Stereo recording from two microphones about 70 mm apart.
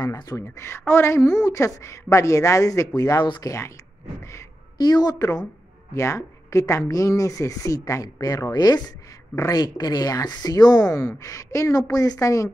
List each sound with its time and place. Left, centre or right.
0.0 s speech: left
0.4 s a woman's voice: left
3.2 s speech: left
3.4 s a woman's voice: left
4.7 s speech: left
5.2 s speech: left
5.9 s a woman's voice: left